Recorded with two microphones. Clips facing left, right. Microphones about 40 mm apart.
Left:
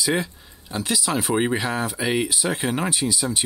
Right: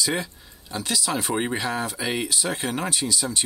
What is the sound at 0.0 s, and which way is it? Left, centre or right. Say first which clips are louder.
Speech: left 3 dB; centre.